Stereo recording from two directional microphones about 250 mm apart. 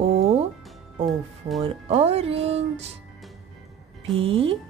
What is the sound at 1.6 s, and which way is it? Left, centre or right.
Speech, right.